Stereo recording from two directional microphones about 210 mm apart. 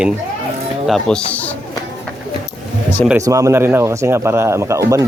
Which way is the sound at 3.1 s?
15° right (ahead or behind).